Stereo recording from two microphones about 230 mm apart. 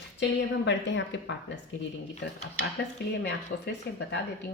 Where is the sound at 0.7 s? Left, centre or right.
Left.